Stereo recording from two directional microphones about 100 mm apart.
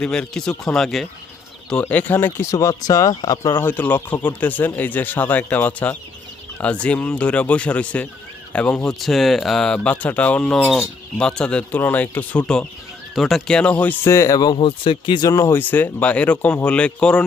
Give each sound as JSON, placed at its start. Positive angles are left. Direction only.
{"t": 0.0, "sound": "speech", "side_deg": 5}
{"t": 1.7, "sound": "speech", "side_deg": 15}
{"t": 3.5, "sound": "speech", "side_deg": 20}
{"t": 14.1, "sound": "speech", "side_deg": 35}
{"t": 15.3, "sound": "speech", "side_deg": 25}